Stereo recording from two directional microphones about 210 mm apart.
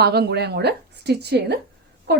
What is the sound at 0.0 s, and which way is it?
Speech, 50° right (ahead or behind).